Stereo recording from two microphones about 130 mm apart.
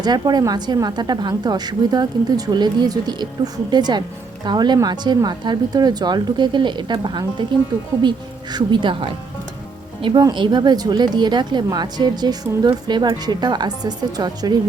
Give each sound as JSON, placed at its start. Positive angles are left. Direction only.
{"t": 0.0, "sound": "a woman's voice", "side_deg": -30}
{"t": 8.5, "sound": "a woman's voice", "side_deg": -40}